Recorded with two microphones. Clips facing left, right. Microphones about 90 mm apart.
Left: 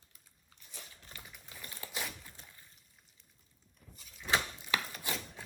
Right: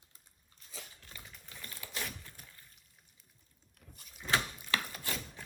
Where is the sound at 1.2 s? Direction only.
10° left (ahead or behind).